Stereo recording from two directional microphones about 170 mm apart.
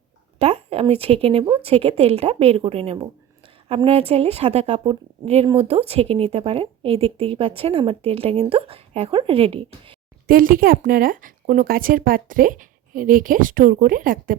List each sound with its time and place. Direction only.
0.3 s speech: 40° right (ahead or behind)
10.2 s a woman's voice: 55° right (ahead or behind)